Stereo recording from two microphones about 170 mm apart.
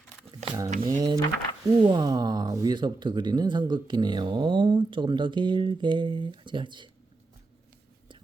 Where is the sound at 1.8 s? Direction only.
25° right (ahead or behind).